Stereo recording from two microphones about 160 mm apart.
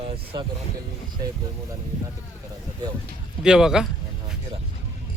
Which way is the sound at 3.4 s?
5° right (ahead or behind).